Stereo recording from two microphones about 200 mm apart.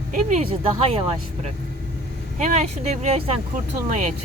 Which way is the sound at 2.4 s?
35° right (ahead or behind).